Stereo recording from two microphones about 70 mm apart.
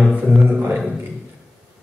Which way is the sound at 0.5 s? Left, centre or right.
Centre.